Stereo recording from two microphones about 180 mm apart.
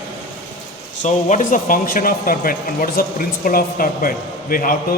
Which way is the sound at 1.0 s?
45° left (ahead or behind).